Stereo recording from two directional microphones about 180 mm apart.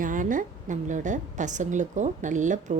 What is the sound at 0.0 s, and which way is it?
A woman's voice, 45° right (ahead or behind).